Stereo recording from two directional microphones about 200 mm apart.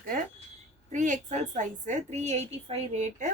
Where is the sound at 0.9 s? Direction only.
40° right (ahead or behind).